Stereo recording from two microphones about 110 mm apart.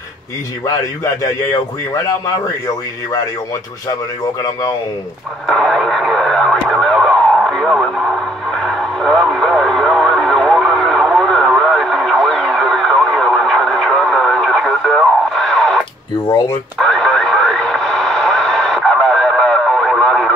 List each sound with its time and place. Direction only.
2.0 s speech: 35° left (ahead or behind)
5.5 s radio: 5° left (ahead or behind)
16.3 s speech: 30° left (ahead or behind)
16.7 s radio: centre (ahead or behind)